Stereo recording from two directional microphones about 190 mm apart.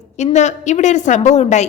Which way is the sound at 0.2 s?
35° left (ahead or behind).